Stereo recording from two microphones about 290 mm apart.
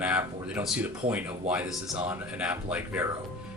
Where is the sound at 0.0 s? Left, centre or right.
Centre.